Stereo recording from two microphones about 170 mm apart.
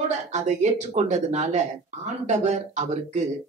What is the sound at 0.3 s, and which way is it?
Speech, 45° right (ahead or behind).